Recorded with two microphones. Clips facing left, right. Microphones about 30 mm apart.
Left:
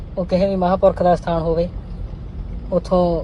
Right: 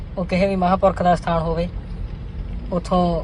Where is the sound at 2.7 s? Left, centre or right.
Right.